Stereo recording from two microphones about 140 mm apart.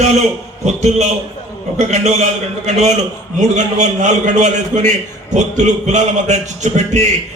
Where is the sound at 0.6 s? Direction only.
55° right (ahead or behind).